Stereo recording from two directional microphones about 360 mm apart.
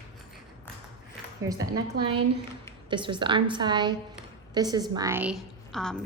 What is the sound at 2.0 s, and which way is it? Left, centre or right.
Speech, right.